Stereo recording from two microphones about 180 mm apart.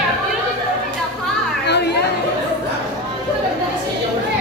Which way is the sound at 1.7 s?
70° left (ahead or behind).